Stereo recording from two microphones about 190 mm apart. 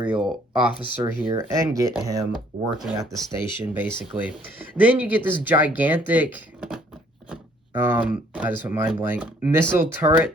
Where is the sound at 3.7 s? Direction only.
10° right (ahead or behind).